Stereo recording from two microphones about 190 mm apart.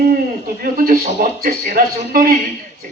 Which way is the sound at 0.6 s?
45° right (ahead or behind).